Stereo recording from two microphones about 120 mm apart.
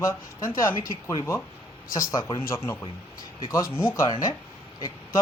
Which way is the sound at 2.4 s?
20° left (ahead or behind).